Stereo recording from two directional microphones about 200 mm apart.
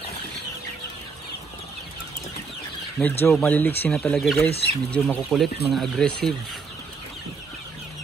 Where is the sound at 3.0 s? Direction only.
5° left (ahead or behind).